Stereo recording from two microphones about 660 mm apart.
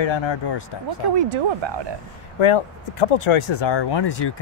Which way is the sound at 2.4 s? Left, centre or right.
Left.